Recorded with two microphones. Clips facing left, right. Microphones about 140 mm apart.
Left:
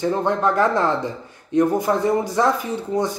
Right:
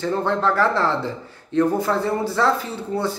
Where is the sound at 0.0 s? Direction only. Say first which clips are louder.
Left 1 dB; 15° left (ahead or behind).